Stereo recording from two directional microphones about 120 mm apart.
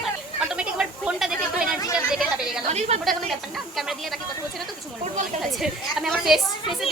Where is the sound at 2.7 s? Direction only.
65° right (ahead or behind).